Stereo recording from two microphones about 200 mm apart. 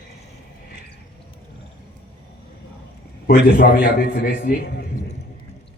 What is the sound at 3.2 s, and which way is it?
Speech, 45° left (ahead or behind).